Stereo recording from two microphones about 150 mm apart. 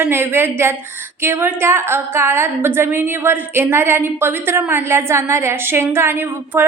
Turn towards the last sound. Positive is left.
turn(degrees=-15)  # may be behind; listen again after turning